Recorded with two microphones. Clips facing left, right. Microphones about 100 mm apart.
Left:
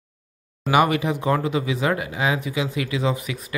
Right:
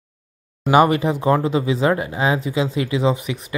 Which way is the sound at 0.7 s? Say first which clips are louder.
Right 4 dB; 30° right (ahead or behind).